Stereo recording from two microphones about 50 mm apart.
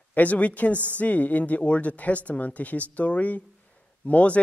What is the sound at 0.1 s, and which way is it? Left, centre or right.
Speech, left.